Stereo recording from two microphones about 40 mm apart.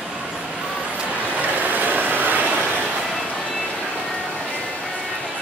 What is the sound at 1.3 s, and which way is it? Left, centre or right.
Vehicle, right.